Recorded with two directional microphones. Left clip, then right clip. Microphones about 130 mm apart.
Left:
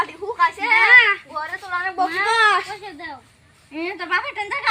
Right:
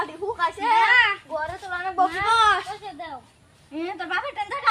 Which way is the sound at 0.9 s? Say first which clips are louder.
Left 6 dB; 30° right (ahead or behind).